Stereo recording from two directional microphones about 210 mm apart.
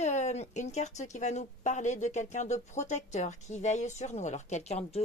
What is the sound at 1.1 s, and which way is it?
Speech, 35° left (ahead or behind).